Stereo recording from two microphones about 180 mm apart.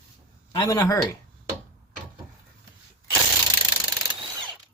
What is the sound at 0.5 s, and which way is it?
Speech, 20° left (ahead or behind).